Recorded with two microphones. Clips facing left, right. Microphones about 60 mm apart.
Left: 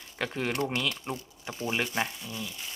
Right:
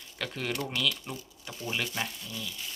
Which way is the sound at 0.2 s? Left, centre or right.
Left.